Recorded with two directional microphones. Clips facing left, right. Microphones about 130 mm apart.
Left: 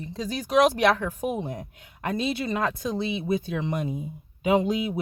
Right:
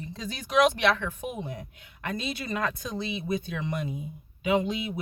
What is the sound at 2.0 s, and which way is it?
Speech, 30° left (ahead or behind).